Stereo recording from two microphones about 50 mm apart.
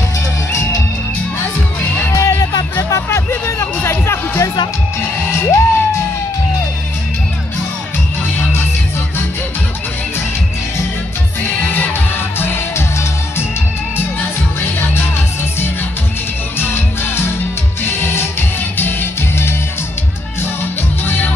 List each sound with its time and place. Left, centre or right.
2.1 s music: left
2.8 s music: left
11.6 s music: left
12.4 s music: left
14.6 s music: left
16.5 s music: left
21.0 s music: left